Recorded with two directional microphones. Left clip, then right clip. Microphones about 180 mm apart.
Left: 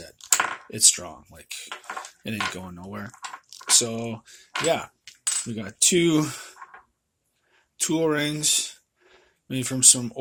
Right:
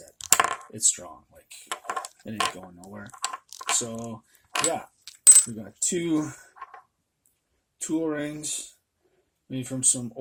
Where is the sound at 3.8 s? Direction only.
30° left (ahead or behind).